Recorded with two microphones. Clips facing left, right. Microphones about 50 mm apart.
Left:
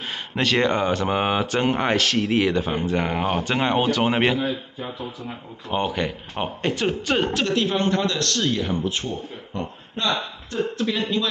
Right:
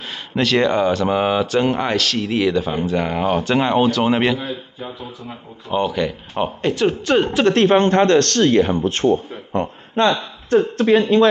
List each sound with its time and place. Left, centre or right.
0.1 s speech: centre
5.7 s speech: centre
6.3 s speech: centre
7.5 s speech: right